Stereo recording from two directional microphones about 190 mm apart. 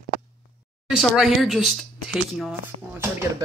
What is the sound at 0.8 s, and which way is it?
Speech, centre (ahead or behind).